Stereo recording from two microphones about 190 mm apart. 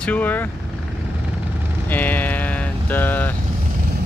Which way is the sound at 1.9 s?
10° left (ahead or behind).